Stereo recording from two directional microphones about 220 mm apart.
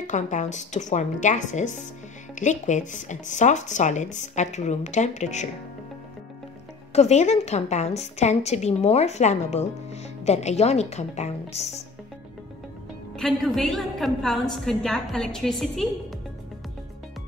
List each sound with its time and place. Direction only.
0.0 s speech: 35° left (ahead or behind)
6.9 s a woman's voice: 30° left (ahead or behind)
13.1 s a woman's voice: centre (ahead or behind)